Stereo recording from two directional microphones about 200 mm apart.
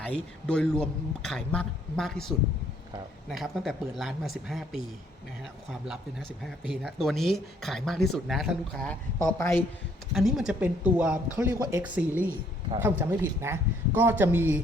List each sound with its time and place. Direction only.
0.0 s speech: 5° left (ahead or behind)
5.9 s speech: centre (ahead or behind)
10.2 s speech: centre (ahead or behind)